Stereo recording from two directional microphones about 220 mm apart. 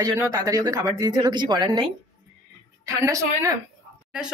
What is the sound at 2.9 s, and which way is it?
Speech, 15° right (ahead or behind).